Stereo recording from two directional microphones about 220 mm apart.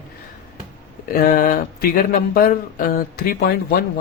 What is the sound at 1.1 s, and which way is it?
Speech, 40° left (ahead or behind).